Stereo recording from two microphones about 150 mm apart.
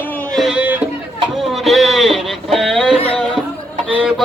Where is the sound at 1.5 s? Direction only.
Centre (ahead or behind).